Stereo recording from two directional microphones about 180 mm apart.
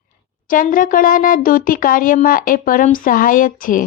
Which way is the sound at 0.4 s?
50° left (ahead or behind).